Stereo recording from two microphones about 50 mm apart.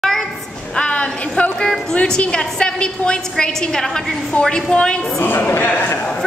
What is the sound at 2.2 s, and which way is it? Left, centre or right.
A woman's voice, left.